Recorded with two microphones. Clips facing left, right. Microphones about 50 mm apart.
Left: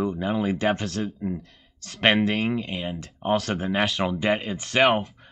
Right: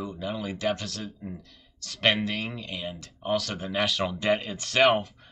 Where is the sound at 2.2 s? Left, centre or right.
Centre.